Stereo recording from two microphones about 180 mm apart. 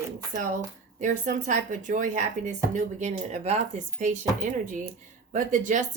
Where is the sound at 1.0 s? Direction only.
45° right (ahead or behind).